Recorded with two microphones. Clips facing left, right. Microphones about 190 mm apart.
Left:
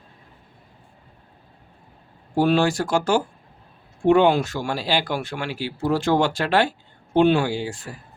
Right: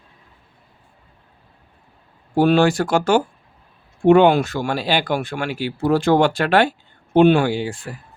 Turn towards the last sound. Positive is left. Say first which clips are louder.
# right 4 dB
turn(degrees=-60)  # may be behind; listen again after turning